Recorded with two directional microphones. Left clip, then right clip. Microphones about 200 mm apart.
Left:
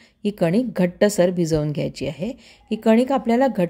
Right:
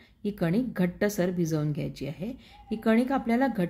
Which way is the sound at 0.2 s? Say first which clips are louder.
Left 9 dB; 40° left (ahead or behind).